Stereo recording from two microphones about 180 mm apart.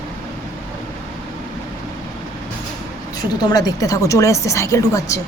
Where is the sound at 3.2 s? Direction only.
20° left (ahead or behind).